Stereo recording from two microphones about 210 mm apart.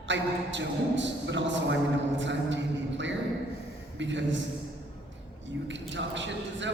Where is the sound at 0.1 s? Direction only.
60° right (ahead or behind).